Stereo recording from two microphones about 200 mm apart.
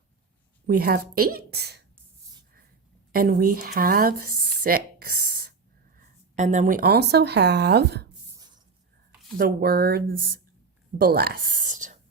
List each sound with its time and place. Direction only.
0.8 s a woman's voice: 50° right (ahead or behind)
3.1 s a woman's voice: 45° right (ahead or behind)
6.0 s speech: 35° right (ahead or behind); by 8.0 s 55° right (ahead or behind)
9.4 s a woman's voice: 50° right (ahead or behind)